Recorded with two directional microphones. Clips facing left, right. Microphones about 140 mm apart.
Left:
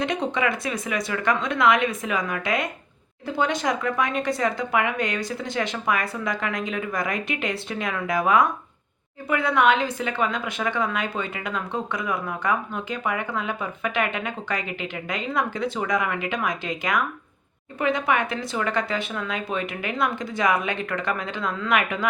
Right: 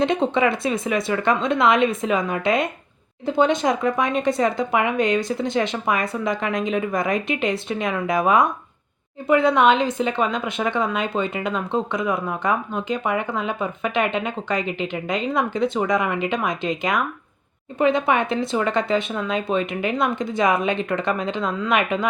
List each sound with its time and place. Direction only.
0.0 s speech: 25° right (ahead or behind)